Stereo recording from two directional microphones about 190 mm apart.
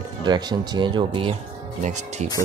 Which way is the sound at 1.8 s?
40° right (ahead or behind).